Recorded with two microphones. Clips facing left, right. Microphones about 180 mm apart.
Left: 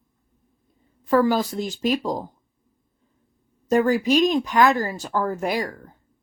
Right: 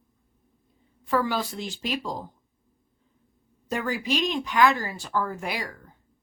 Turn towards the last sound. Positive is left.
turn(degrees=45)  # may be behind; listen again after turning